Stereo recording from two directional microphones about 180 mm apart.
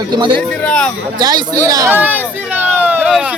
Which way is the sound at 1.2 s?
20° right (ahead or behind).